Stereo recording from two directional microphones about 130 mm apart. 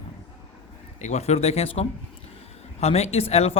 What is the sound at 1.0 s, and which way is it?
Speech, 60° left (ahead or behind).